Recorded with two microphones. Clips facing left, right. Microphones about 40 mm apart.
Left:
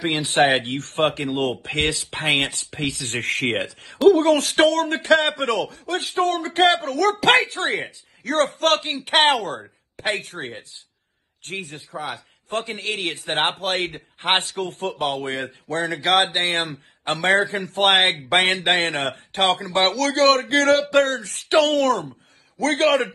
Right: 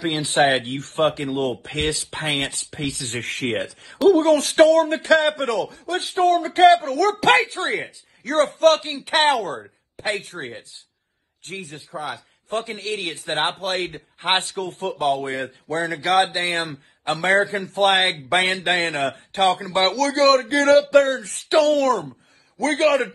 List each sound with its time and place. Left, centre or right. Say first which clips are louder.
0.1 s speech: even; left
9.9 s speech: left 1 dB; left
11.4 s a man's voice: left 2 dB; left